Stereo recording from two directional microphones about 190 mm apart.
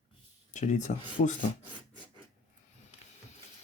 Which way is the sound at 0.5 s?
40° left (ahead or behind).